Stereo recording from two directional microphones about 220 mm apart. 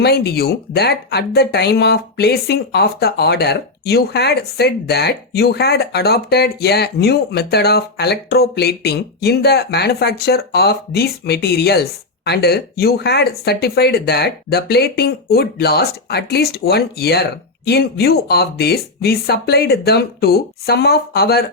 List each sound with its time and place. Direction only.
0.0 s speech: 45° left (ahead or behind)